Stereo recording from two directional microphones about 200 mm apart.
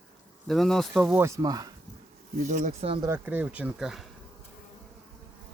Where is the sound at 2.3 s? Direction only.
40° right (ahead or behind).